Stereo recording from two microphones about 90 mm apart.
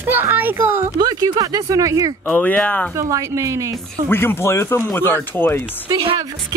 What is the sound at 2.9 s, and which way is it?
Speech, 35° right (ahead or behind).